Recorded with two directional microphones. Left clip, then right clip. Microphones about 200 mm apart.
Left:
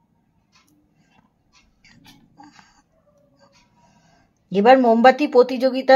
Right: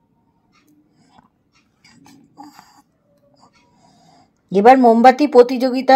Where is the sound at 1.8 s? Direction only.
20° right (ahead or behind).